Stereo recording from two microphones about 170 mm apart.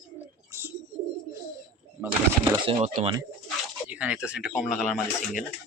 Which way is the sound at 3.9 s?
5° right (ahead or behind).